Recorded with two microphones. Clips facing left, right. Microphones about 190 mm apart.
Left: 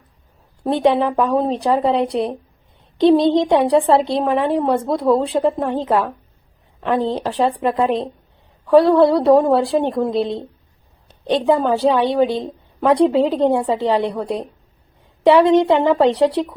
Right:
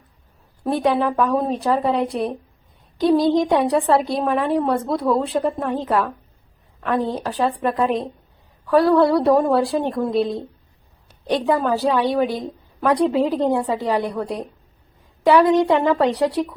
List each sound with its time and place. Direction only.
0.6 s a woman's voice: 25° left (ahead or behind)
7.1 s a woman's voice: 25° left (ahead or behind)